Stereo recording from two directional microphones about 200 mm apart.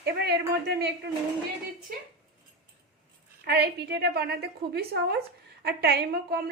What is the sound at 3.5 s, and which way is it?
A woman's voice, 55° right (ahead or behind).